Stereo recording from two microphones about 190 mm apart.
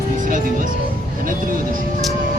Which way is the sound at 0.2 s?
45° right (ahead or behind).